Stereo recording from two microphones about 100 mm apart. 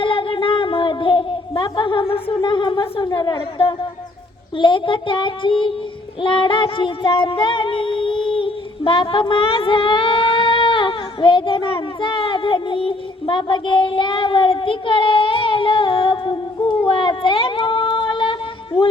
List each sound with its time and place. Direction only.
0.0 s a sound: 60° left (ahead or behind)
4.5 s child singing: 55° left (ahead or behind)
8.3 s female singing: 60° left (ahead or behind)